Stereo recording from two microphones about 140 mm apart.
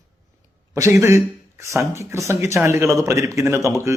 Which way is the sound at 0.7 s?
20° right (ahead or behind).